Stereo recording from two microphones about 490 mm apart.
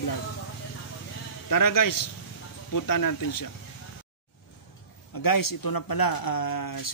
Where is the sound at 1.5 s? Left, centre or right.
Left.